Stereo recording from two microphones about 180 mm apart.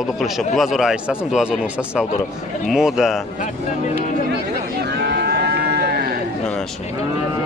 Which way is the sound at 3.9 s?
65° right (ahead or behind).